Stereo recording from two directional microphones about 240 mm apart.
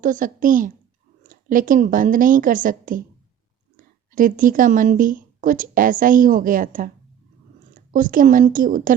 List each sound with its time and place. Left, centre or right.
0.0 s a woman's voice: right
4.1 s a woman's voice: right